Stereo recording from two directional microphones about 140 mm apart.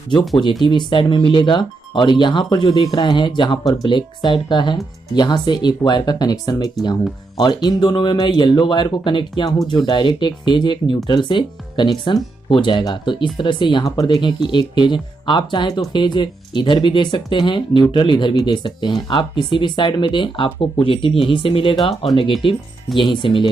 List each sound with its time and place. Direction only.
0.7 s speech: 35° left (ahead or behind)